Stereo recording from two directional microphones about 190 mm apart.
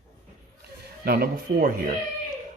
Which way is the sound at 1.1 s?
50° right (ahead or behind).